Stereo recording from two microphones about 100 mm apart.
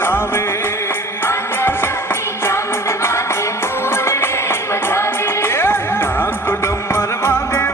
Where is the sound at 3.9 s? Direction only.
25° left (ahead or behind).